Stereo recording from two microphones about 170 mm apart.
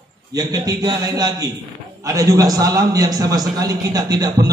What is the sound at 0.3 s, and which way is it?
A man's voice, 20° right (ahead or behind).